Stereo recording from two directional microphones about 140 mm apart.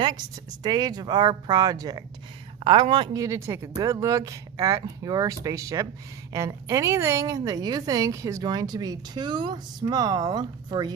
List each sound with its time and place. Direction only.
0.6 s speech: 30° right (ahead or behind)
3.2 s speech: 20° right (ahead or behind)